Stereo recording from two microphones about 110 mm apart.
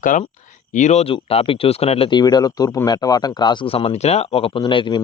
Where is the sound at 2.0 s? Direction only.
40° left (ahead or behind).